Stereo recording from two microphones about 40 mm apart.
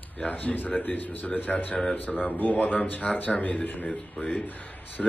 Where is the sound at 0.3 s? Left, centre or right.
Left.